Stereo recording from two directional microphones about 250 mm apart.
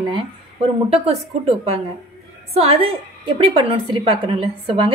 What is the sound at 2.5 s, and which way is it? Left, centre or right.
A woman's voice, right.